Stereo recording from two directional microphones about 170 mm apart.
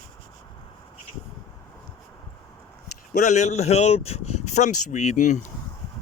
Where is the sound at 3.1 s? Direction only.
45° left (ahead or behind).